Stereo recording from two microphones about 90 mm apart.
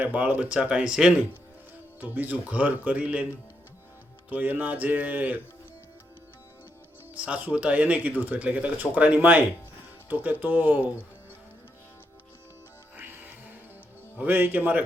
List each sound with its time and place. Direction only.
0.0 s speech: 15° right (ahead or behind)
4.3 s speech: 20° right (ahead or behind)
7.1 s speech: 15° right (ahead or behind)
13.0 s music: 20° right (ahead or behind)
14.2 s speech: 20° right (ahead or behind)